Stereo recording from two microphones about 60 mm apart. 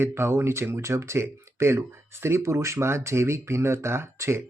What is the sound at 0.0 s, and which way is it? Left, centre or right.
Speech, right.